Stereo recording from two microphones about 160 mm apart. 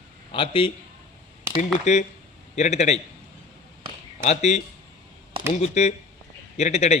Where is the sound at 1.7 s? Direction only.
45° left (ahead or behind).